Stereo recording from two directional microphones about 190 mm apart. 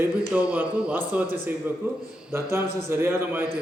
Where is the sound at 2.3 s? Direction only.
15° right (ahead or behind).